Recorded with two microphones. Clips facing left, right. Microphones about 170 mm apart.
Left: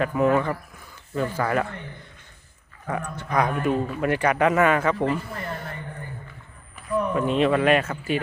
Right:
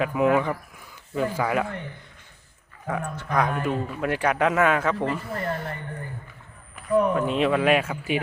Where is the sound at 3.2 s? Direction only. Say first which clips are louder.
Left 2 dB; centre (ahead or behind).